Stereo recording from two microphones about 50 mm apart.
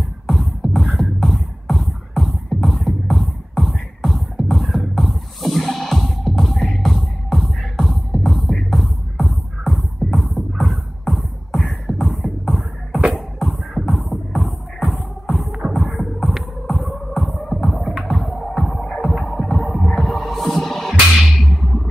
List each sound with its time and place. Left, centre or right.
0.3 s beatboxing: centre
2.8 s music: centre
20.2 s heart sounds: centre
21.5 s music: centre